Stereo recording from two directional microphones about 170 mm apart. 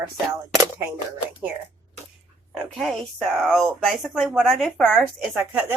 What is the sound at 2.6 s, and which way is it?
Speech, centre (ahead or behind).